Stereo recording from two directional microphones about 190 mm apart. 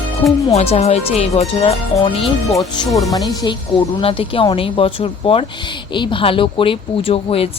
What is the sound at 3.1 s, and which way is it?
A woman's voice, 20° left (ahead or behind).